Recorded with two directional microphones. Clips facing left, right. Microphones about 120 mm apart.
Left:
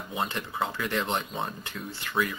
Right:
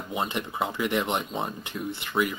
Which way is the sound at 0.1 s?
20° right (ahead or behind).